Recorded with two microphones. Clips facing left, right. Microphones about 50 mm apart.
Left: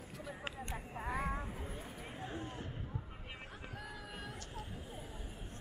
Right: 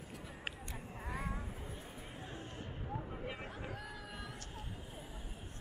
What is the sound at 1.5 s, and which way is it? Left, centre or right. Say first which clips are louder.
Vehicle: left 2 dB; centre.